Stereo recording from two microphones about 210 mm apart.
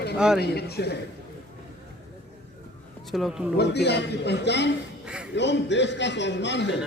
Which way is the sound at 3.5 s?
50° left (ahead or behind).